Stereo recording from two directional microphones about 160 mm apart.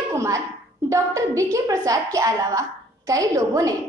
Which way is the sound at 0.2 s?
20° right (ahead or behind).